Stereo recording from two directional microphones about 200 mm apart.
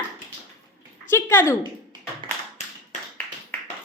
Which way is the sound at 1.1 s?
10° left (ahead or behind).